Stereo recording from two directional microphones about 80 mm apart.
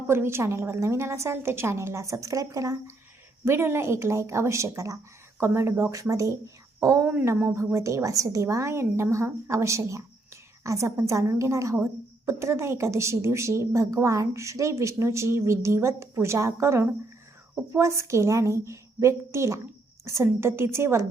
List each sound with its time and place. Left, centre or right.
0.1 s a woman's voice: right
3.4 s a woman's voice: right